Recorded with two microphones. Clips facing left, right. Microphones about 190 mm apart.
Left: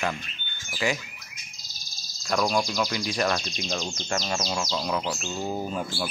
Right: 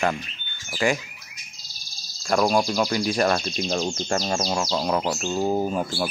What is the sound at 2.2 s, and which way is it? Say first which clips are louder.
Speech: right 4 dB; 45° right (ahead or behind).